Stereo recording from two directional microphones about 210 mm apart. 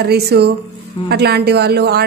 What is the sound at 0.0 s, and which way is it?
A woman's voice, 50° right (ahead or behind).